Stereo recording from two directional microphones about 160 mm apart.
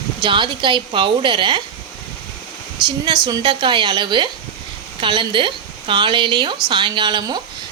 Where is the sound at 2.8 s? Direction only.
30° right (ahead or behind).